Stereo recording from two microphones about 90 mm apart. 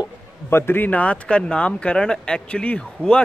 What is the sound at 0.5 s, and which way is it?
Speech, 25° left (ahead or behind).